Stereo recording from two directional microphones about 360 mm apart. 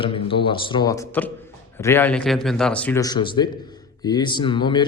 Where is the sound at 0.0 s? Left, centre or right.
Centre.